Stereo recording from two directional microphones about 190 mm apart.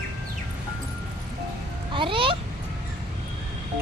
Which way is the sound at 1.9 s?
25° right (ahead or behind).